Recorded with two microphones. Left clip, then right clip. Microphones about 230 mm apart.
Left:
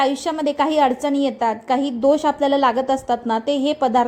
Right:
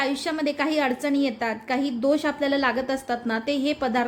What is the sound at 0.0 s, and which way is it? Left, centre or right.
A woman's voice, centre.